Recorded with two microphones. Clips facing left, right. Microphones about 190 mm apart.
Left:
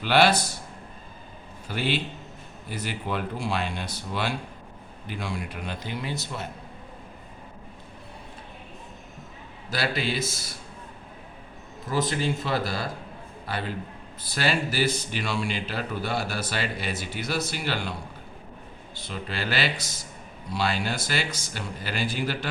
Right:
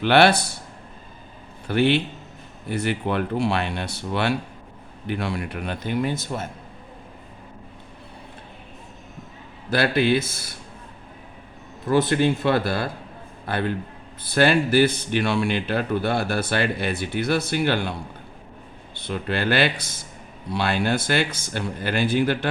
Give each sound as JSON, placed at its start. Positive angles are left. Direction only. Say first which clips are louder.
{"t": 0.0, "sound": "speech", "louder": "right 4 dB", "side_deg": -60}
{"t": 1.6, "sound": "a man's voice", "louder": "right 8 dB", "side_deg": -60}
{"t": 9.6, "sound": "speech", "louder": "right 8 dB", "side_deg": -60}
{"t": 11.9, "sound": "speech", "louder": "right 7 dB", "side_deg": -60}
{"t": 18.9, "sound": "speech", "louder": "right 7 dB", "side_deg": -60}